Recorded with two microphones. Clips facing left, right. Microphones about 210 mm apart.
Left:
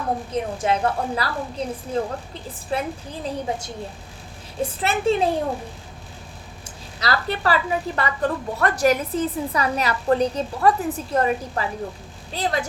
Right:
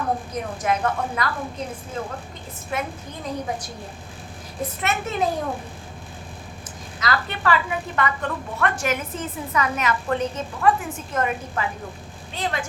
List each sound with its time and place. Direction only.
0.3 s a woman's voice: 30° left (ahead or behind)
2.6 s a woman's voice: 30° left (ahead or behind)
6.7 s a woman's voice: 35° left (ahead or behind)